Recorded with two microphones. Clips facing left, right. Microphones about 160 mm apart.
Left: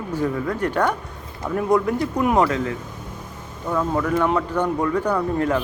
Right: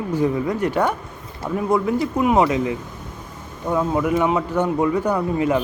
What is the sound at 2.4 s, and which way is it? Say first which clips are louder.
Speech: right 3 dB; 15° right (ahead or behind).